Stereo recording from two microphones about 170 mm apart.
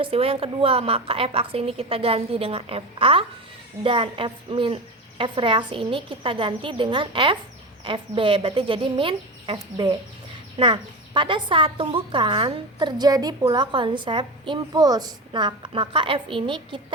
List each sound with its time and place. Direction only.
0.0 s a woman's voice: 35° right (ahead or behind)